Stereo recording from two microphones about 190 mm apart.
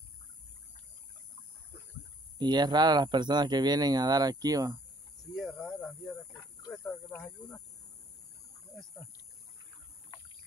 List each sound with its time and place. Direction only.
2.3 s speech: 20° right (ahead or behind)
5.3 s cricket: centre (ahead or behind)
7.2 s speech: 5° left (ahead or behind)